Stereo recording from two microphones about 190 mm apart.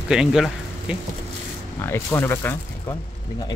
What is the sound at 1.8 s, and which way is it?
Speech, 15° left (ahead or behind).